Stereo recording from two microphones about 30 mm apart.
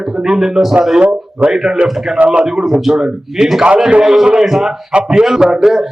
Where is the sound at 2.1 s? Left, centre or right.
Right.